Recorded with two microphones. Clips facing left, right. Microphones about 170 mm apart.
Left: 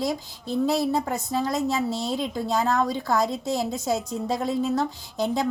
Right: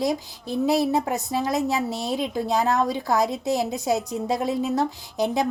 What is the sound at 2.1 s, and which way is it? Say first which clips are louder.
Speech: right 2 dB; 5° right (ahead or behind).